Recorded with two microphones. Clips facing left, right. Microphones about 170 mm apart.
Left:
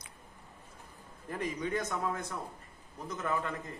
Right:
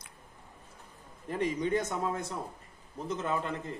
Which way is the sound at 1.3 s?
25° right (ahead or behind).